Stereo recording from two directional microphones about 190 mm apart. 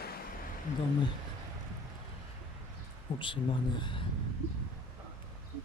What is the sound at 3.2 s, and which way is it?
Speech, 25° left (ahead or behind).